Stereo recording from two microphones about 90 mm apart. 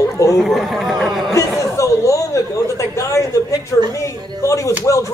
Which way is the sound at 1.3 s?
35° left (ahead or behind).